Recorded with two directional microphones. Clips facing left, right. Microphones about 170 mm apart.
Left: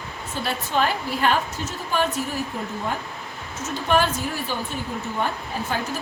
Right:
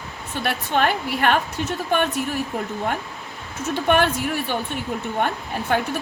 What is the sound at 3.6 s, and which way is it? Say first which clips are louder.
Speech: right 3 dB; 60° right (ahead or behind).